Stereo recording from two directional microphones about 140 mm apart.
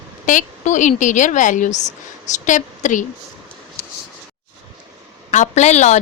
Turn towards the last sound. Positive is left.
turn(degrees=55)  # may be behind; listen again after turning